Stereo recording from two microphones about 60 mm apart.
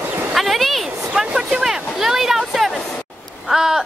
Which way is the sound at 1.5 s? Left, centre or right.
Centre.